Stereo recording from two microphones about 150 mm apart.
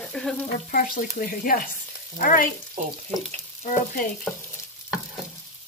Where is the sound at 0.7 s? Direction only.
70° left (ahead or behind).